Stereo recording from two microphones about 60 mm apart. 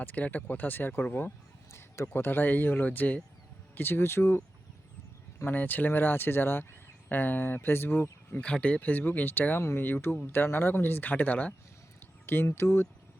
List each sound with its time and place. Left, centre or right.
0.0 s speech: left
2.1 s speech: left
5.5 s speech: left
8.4 s speech: centre
12.2 s speech: left